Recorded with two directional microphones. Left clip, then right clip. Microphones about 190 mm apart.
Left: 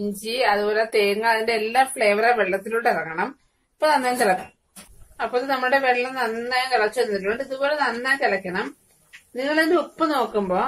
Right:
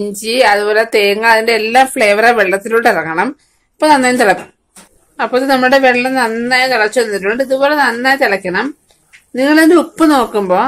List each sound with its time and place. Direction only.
0.2 s a woman's voice: 50° right (ahead or behind)